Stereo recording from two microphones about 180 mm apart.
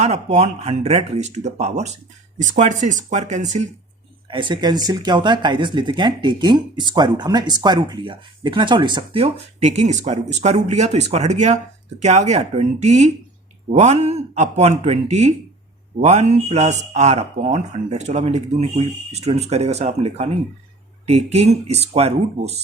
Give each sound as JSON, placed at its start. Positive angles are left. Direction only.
{"t": 0.0, "sound": "speech", "side_deg": -40}
{"t": 4.3, "sound": "speech", "side_deg": -25}